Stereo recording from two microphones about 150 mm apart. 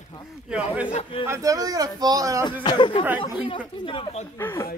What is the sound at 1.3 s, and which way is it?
Speech, 20° right (ahead or behind).